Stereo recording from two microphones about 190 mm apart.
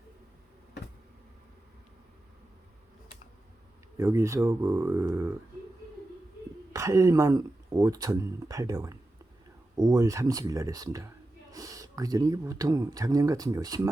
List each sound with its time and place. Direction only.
3.9 s speech: 15° right (ahead or behind)
6.7 s speech: 15° right (ahead or behind)